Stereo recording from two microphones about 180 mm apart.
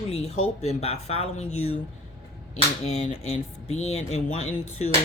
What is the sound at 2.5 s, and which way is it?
Speech, 35° left (ahead or behind).